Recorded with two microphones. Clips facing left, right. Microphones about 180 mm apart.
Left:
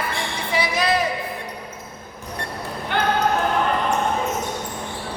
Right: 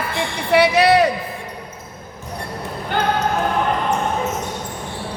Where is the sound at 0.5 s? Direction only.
70° right (ahead or behind).